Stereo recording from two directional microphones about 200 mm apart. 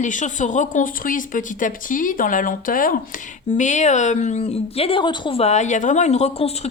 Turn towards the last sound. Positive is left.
turn(degrees=35)  # may be behind; listen again after turning